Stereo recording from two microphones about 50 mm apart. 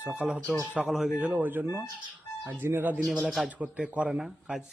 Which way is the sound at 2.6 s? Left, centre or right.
Right.